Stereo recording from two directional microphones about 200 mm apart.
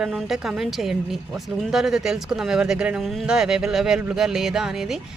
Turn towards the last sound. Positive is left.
turn(degrees=0)  # may be behind; listen again after turning